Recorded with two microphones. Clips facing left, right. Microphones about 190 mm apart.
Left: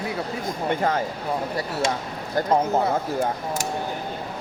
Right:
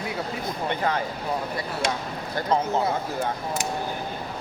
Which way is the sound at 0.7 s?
40° left (ahead or behind).